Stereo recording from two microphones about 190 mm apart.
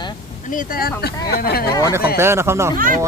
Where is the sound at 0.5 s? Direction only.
45° left (ahead or behind).